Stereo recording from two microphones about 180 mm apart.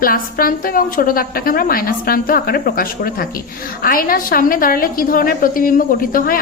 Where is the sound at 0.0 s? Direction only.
55° left (ahead or behind).